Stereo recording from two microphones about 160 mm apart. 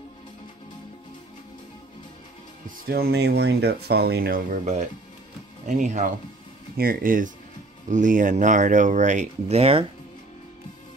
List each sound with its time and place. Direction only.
2.9 s speech: 85° right; by 4.6 s 65° right (ahead or behind)
5.7 s speech: 50° right (ahead or behind)
6.8 s speech: 65° right (ahead or behind); by 9.8 s 35° right (ahead or behind)